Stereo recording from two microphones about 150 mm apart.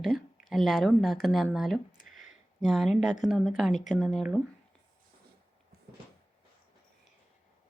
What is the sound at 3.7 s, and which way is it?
Speech, 55° left (ahead or behind).